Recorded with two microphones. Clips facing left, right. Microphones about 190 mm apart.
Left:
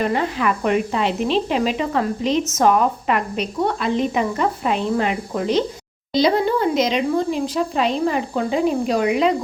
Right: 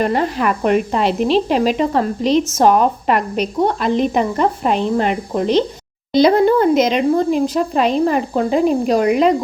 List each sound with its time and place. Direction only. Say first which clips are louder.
0.0 s speech: right 3 dB; 40° right (ahead or behind)
6.1 s speech: right 6 dB; 55° right (ahead or behind)